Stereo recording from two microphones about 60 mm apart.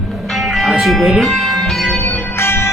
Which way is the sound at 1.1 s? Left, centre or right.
Centre.